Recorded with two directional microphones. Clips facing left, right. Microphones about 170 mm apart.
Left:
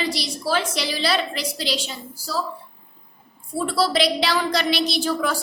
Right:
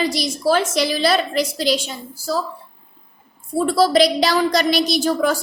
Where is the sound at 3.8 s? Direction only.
40° right (ahead or behind).